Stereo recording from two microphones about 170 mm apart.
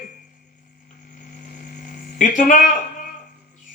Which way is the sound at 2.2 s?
50° left (ahead or behind).